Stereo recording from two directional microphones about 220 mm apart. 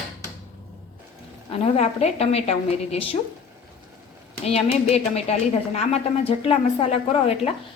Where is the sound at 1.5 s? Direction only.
30° left (ahead or behind).